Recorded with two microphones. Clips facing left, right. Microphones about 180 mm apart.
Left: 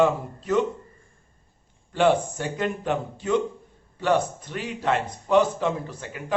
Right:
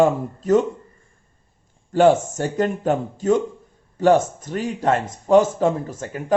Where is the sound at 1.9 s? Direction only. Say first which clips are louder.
Right 5 dB; 40° right (ahead or behind).